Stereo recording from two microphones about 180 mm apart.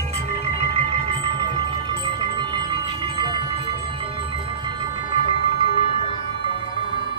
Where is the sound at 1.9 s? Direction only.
25° right (ahead or behind).